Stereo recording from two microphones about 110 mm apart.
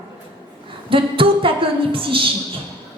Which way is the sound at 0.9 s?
55° right (ahead or behind).